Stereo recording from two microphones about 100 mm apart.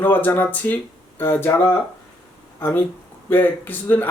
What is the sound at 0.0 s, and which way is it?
Speech, 20° left (ahead or behind).